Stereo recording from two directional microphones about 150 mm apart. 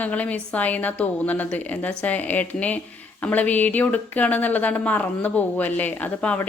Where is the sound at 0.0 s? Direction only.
10° left (ahead or behind).